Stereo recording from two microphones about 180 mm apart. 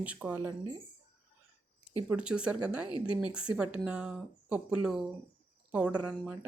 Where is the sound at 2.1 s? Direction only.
5° right (ahead or behind).